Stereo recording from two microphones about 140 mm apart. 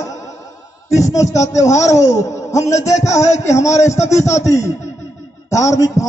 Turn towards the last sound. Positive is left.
turn(degrees=25)  # may be behind; listen again after turning